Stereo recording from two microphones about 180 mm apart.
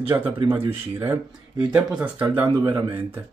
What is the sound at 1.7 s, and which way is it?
Speech, 5° right (ahead or behind).